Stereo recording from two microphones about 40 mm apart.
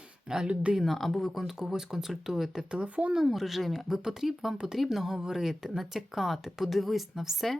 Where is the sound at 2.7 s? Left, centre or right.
Right.